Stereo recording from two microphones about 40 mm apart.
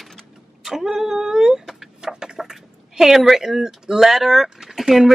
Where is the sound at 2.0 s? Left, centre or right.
Centre.